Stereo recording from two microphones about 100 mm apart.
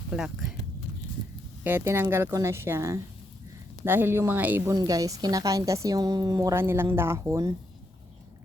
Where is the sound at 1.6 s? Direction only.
20° right (ahead or behind).